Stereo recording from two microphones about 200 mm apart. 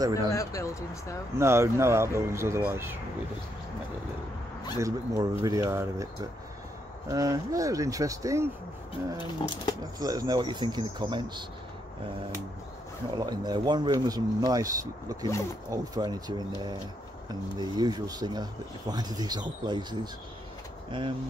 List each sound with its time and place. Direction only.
0.0 s speech: 20° right (ahead or behind)
0.3 s speech: 15° left (ahead or behind)
1.4 s speech: 15° right (ahead or behind)
4.7 s speech: 15° right (ahead or behind)
7.1 s speech: 15° right (ahead or behind)
9.9 s speech: 20° right (ahead or behind)
13.1 s speech: 20° right (ahead or behind)